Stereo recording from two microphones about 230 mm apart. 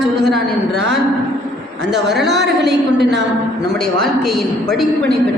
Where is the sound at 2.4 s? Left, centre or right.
Right.